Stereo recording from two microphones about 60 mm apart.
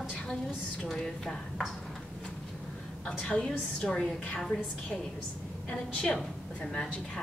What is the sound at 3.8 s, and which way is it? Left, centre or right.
A woman's voice, centre.